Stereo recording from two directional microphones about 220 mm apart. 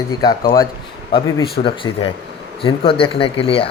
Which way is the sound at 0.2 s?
15° left (ahead or behind).